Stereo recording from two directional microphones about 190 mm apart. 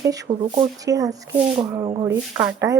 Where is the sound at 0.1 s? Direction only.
20° right (ahead or behind).